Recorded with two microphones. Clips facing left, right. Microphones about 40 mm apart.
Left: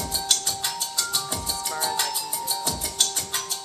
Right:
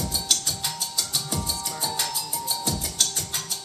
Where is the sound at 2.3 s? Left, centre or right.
Centre.